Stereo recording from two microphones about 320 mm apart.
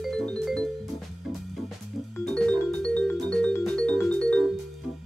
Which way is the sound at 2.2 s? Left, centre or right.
Centre.